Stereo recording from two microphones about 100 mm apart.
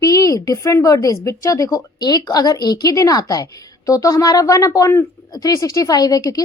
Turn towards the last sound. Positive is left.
turn(degrees=40)  # may be behind; listen again after turning